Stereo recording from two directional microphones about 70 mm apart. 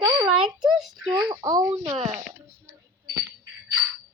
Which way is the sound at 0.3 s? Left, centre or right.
Centre.